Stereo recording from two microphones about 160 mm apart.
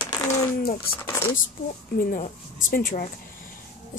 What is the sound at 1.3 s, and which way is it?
A woman's voice, 60° left (ahead or behind).